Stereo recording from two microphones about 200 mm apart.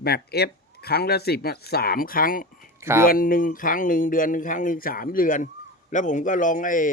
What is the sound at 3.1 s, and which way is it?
A man's voice, 45° left (ahead or behind).